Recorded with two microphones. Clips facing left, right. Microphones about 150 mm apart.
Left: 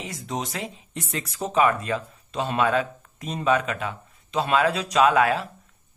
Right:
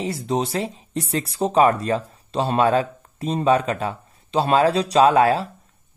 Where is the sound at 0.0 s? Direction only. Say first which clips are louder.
Right 8 dB; 30° right (ahead or behind).